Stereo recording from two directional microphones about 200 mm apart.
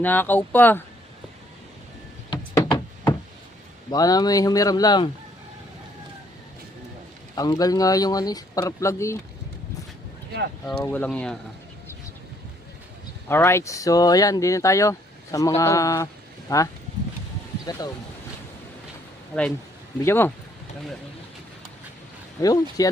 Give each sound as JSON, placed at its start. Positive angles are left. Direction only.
{"t": 0.0, "sound": "speech", "side_deg": 10}
{"t": 2.3, "sound": "knock", "side_deg": 20}
{"t": 3.9, "sound": "speech", "side_deg": 20}
{"t": 7.3, "sound": "speech", "side_deg": 20}
{"t": 10.7, "sound": "speech", "side_deg": 10}
{"t": 13.2, "sound": "speech", "side_deg": 15}
{"t": 17.7, "sound": "speech", "side_deg": 20}
{"t": 20.1, "sound": "speech", "side_deg": 10}
{"t": 22.4, "sound": "speech", "side_deg": 15}